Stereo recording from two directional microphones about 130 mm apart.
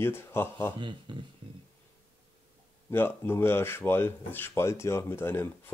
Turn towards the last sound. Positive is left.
turn(degrees=15)  # may be behind; listen again after turning